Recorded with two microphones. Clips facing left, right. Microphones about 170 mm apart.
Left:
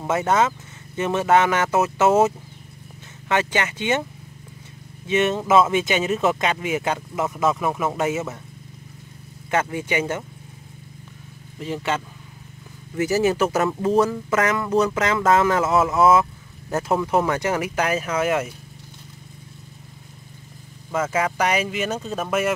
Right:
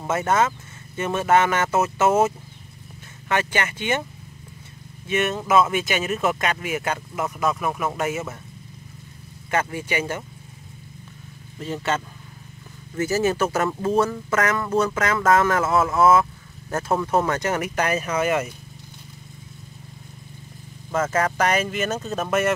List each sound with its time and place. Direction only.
0.0 s speech: 15° left (ahead or behind)
5.0 s speech: 20° left (ahead or behind)
9.5 s speech: 20° left (ahead or behind)
11.6 s speech: 10° left (ahead or behind)
20.9 s speech: 10° left (ahead or behind)